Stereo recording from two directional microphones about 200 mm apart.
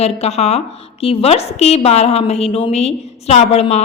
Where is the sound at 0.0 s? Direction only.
30° left (ahead or behind).